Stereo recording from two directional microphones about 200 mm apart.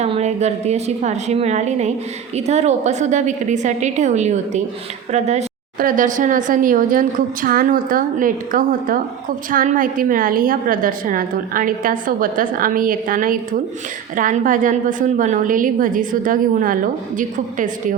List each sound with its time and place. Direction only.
0.0 s a woman's voice: 35° right (ahead or behind)